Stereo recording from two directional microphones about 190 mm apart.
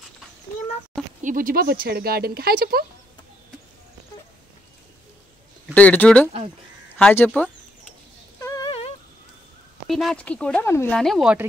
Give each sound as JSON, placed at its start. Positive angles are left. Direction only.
{"t": 1.2, "sound": "speech", "side_deg": -45}
{"t": 5.8, "sound": "speech", "side_deg": 10}
{"t": 8.4, "sound": "a sound", "side_deg": 15}
{"t": 8.6, "sound": "a sound", "side_deg": 30}
{"t": 9.8, "sound": "speech", "side_deg": 0}
{"t": 11.0, "sound": "speech", "side_deg": 0}